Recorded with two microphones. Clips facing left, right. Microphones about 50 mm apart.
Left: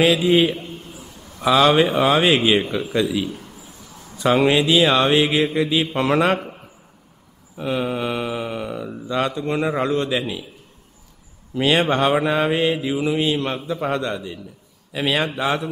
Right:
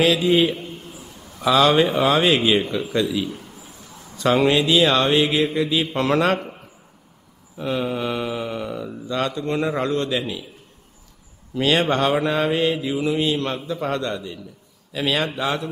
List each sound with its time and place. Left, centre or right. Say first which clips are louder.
0.0 s mantra: left 1 dB; centre
7.5 s mantra: left 1 dB; centre
11.5 s mantra: left 1 dB; centre